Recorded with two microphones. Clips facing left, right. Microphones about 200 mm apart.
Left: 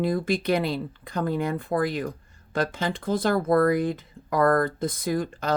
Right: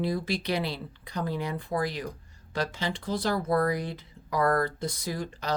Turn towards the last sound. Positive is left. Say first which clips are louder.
# left 6 dB
turn(degrees=50)  # may be behind; listen again after turning